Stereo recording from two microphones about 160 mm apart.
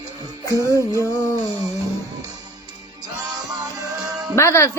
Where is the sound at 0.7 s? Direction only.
20° right (ahead or behind).